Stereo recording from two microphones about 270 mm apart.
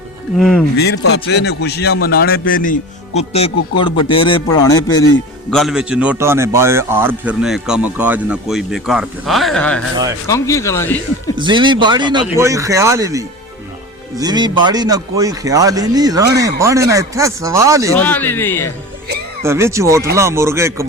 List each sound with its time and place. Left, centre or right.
0.3 s a man's voice: centre
0.8 s a man's voice: left; by 5.0 s centre
5.5 s a man's voice: centre
11.3 s speech: centre
17.9 s a man's voice: centre
19.5 s speech: centre